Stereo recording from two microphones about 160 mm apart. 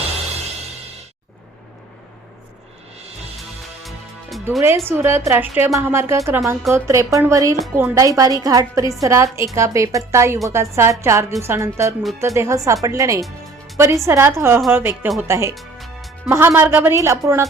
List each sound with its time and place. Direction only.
3.8 s music: centre (ahead or behind)
4.9 s a woman's voice: 15° right (ahead or behind)
15.5 s music: centre (ahead or behind)
16.3 s speech: 15° right (ahead or behind)